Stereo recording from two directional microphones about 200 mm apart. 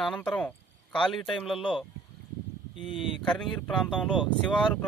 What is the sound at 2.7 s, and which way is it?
Speech, 25° left (ahead or behind).